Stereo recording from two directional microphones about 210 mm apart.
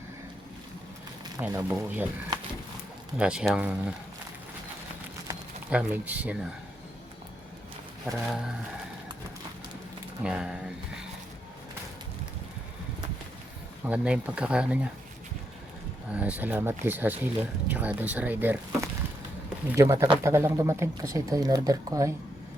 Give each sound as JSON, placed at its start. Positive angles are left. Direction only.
{"t": 1.4, "sound": "speech", "side_deg": -10}
{"t": 3.2, "sound": "speech", "side_deg": -5}
{"t": 5.3, "sound": "speech", "side_deg": -10}
{"t": 8.1, "sound": "speech", "side_deg": 0}
{"t": 10.2, "sound": "speech", "side_deg": -5}
{"t": 13.8, "sound": "speech", "side_deg": -5}
{"t": 16.1, "sound": "speech", "side_deg": -5}